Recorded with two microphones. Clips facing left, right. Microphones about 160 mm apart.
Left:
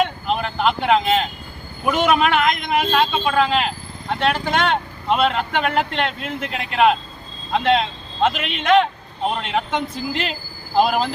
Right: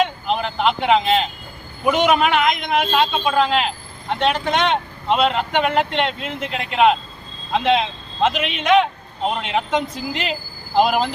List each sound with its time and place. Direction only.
0.0 s vehicle: centre (ahead or behind)
1.8 s a man's voice: centre (ahead or behind)